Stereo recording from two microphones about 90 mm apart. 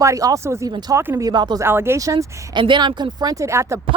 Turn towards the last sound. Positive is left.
turn(degrees=-30)  # may be behind; listen again after turning